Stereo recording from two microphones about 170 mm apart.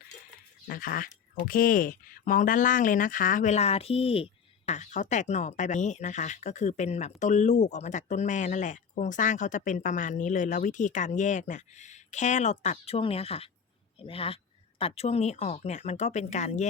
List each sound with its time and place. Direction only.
0.7 s speech: 55° left (ahead or behind)